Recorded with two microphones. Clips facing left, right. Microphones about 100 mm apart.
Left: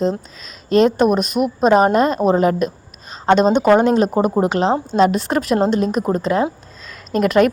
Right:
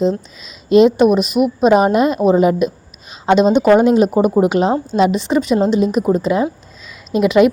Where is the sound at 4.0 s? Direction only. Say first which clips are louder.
Right 3 dB; 10° right (ahead or behind).